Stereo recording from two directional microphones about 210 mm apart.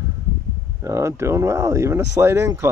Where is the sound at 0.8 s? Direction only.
15° right (ahead or behind).